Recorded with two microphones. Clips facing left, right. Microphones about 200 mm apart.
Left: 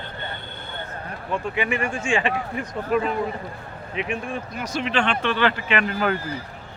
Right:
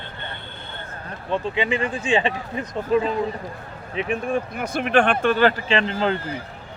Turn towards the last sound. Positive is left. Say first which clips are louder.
# right 1 dB
turn(degrees=-25)  # may be behind; listen again after turning